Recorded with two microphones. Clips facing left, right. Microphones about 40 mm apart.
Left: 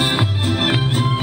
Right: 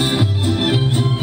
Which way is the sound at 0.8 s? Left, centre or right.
Centre.